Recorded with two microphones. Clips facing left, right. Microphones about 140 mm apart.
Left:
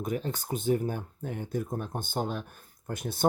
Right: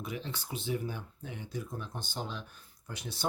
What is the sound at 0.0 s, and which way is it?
Speech, 45° left (ahead or behind).